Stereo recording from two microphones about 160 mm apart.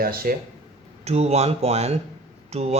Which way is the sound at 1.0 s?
40° right (ahead or behind).